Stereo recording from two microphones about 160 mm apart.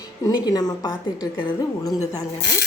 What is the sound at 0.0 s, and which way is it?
A woman's voice, 25° left (ahead or behind).